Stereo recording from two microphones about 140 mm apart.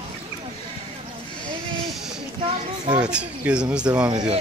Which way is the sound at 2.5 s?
35° right (ahead or behind).